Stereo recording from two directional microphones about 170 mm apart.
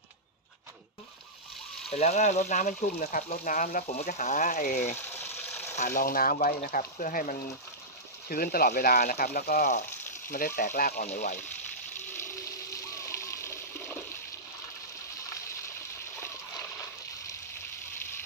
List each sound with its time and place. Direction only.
1.9 s speech: 40° left (ahead or behind)
5.0 s a sound: 15° left (ahead or behind)
5.7 s speech: 50° left (ahead or behind)
12.1 s water: 15° left (ahead or behind)